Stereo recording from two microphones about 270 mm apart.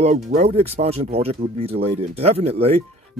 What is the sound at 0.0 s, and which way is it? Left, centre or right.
Speech, right.